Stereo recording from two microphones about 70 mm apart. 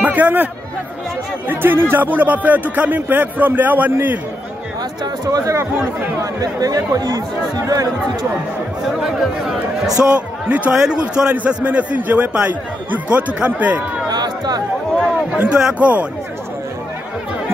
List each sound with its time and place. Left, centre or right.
0.0 s a sound: right
1.5 s speech: right
5.0 s speech: right
5.6 s speech: right
6.4 s speech: right
9.0 s speech: centre
10.0 s speech: right
10.7 s a man's voice: centre
14.0 s music: right
15.0 s speech: centre